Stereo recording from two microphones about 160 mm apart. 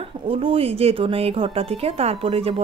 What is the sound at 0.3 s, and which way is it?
Speech, 35° right (ahead or behind).